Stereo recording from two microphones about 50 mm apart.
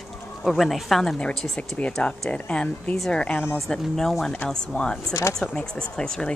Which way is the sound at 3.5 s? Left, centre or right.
Centre.